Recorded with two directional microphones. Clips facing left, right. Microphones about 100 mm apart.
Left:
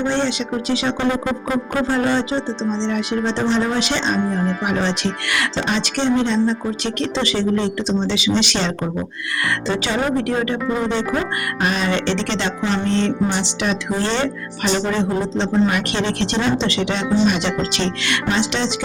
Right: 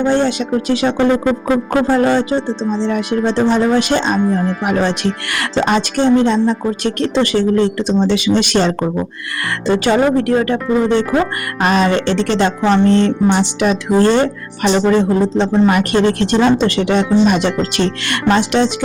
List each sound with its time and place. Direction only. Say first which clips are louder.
0.0 s speech: right 6 dB; 50° right (ahead or behind)